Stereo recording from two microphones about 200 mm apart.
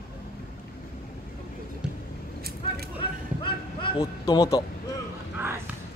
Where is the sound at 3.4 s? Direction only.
25° left (ahead or behind).